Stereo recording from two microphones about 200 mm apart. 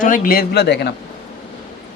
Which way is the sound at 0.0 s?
45° left (ahead or behind).